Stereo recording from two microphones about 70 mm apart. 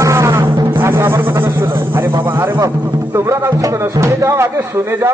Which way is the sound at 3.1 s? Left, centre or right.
Right.